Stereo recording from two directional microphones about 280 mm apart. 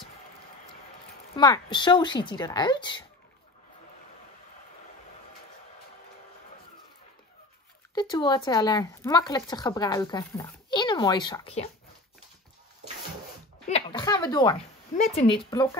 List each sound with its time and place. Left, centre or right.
1.3 s speech: centre
7.9 s speech: centre
13.7 s speech: centre